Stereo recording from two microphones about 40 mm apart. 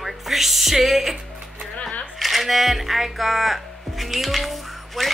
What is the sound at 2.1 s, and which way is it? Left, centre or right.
Speech, centre.